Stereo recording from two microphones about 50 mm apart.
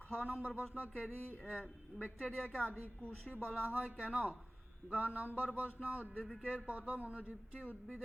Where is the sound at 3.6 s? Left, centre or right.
Right.